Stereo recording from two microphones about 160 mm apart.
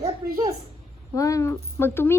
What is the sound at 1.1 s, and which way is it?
Speech, 20° left (ahead or behind).